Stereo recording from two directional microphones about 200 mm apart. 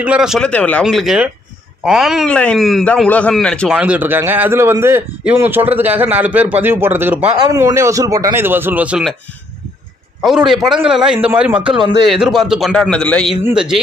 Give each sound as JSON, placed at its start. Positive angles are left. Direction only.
{"t": 0.0, "sound": "a man's voice", "side_deg": -5}
{"t": 10.2, "sound": "a man's voice", "side_deg": 0}